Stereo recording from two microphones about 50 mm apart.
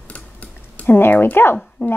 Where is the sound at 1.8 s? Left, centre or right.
Left.